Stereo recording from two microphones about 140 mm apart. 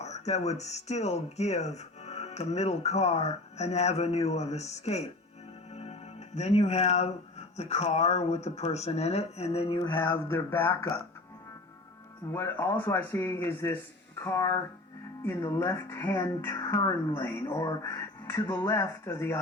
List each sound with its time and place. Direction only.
0.0 s speech: 55° left (ahead or behind)
10.0 s speech: 15° left (ahead or behind)
12.3 s speech: 15° left (ahead or behind)